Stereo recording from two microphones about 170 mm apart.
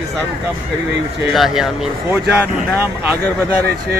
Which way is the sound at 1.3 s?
Centre (ahead or behind).